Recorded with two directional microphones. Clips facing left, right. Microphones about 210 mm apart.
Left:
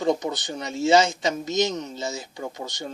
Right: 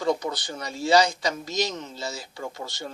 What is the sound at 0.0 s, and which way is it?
Speech, 20° left (ahead or behind).